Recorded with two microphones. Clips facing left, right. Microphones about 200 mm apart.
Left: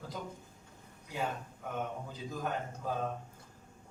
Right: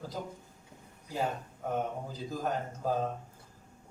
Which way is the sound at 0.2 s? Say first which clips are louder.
Right 4 dB; 45° right (ahead or behind).